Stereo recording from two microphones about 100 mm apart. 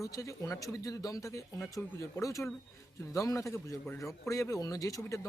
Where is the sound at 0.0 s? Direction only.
30° left (ahead or behind).